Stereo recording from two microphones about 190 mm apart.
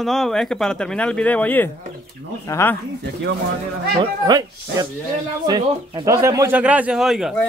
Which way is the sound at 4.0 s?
20° right (ahead or behind).